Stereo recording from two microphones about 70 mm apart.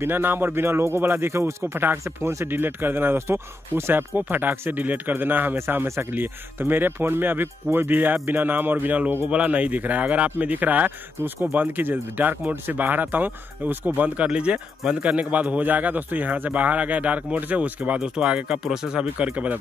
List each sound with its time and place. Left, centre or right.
0.0 s a man's voice: right